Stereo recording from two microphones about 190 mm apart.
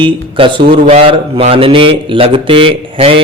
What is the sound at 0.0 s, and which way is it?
A man's voice, 25° right (ahead or behind).